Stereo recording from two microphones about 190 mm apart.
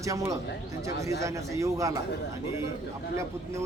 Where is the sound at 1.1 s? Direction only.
15° right (ahead or behind).